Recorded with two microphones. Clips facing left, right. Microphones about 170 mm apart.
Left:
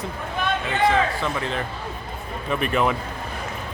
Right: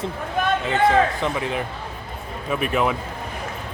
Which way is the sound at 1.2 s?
15° right (ahead or behind).